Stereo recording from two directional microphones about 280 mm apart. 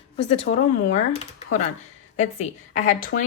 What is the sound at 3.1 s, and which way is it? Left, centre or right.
Speech, left.